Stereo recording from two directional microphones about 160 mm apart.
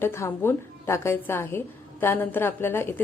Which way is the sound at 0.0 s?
15° left (ahead or behind).